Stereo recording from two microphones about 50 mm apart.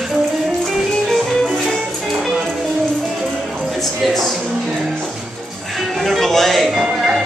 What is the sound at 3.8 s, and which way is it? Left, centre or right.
Music, centre.